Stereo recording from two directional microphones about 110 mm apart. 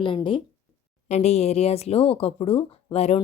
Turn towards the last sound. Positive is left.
turn(degrees=75)  # may be behind; listen again after turning